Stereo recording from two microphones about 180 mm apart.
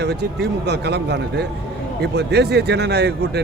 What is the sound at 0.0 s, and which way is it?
A man's voice, 65° right (ahead or behind).